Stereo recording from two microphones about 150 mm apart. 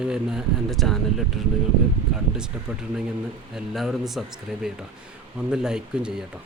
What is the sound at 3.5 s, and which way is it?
A man's voice, centre (ahead or behind).